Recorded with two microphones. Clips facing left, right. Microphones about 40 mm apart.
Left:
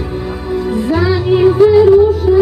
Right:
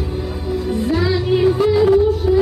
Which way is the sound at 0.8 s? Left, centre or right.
Centre.